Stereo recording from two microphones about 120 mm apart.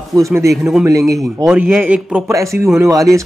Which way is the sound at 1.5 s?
15° right (ahead or behind).